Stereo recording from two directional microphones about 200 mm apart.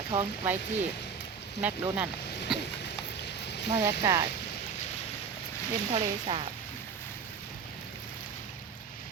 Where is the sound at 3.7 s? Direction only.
15° right (ahead or behind).